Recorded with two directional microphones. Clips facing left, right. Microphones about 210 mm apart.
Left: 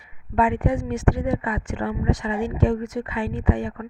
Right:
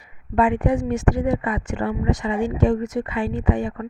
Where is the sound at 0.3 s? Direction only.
45° right (ahead or behind).